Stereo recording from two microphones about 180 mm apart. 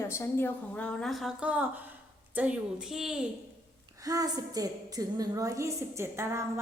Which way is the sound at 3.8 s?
20° right (ahead or behind).